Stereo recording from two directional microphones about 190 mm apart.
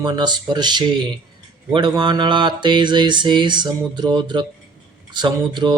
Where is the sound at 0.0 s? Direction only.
20° right (ahead or behind).